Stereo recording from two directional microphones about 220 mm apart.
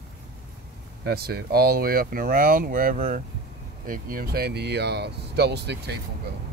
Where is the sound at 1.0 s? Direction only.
45° right (ahead or behind).